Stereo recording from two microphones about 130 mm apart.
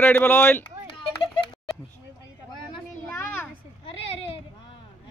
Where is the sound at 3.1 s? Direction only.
15° left (ahead or behind).